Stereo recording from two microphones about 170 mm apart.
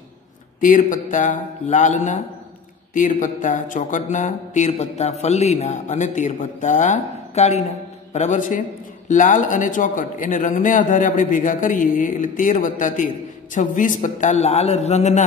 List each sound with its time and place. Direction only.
0.6 s speech: 50° left (ahead or behind)